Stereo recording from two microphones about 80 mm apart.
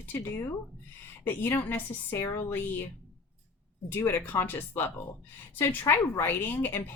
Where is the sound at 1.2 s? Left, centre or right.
Left.